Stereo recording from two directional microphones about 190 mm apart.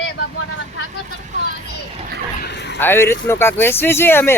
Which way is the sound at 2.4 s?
65° left (ahead or behind).